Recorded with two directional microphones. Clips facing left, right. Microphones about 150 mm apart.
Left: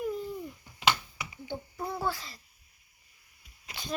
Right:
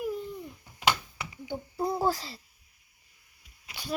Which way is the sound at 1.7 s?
35° right (ahead or behind).